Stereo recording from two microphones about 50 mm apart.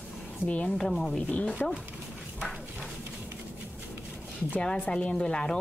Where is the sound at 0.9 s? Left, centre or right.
Centre.